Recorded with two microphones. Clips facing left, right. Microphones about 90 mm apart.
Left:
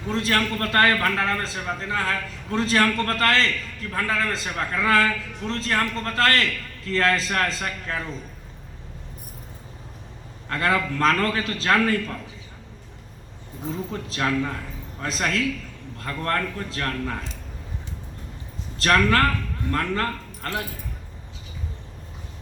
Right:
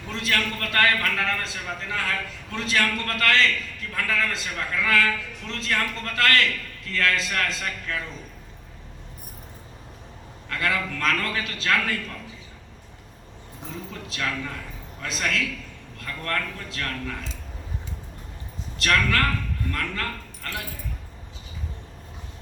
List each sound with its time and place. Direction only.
0.1 s a man's voice: 35° left (ahead or behind)
10.5 s a man's voice: 35° left (ahead or behind)
13.9 s a man's voice: 35° left (ahead or behind)
18.8 s a man's voice: 35° left (ahead or behind)